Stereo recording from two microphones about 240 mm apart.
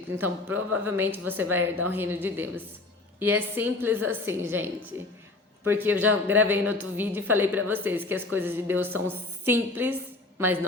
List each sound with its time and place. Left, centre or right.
0.2 s a woman's voice: centre